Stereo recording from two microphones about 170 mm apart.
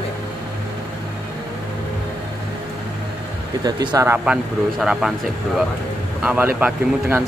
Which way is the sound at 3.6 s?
25° right (ahead or behind).